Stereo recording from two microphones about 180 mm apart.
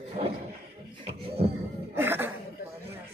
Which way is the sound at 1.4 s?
35° right (ahead or behind).